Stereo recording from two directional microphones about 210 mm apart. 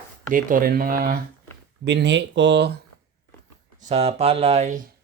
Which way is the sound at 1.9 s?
55° right (ahead or behind).